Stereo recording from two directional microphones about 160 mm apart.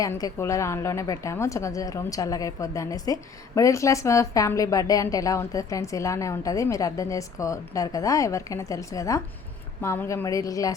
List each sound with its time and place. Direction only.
0.0 s a woman's voice: 20° left (ahead or behind)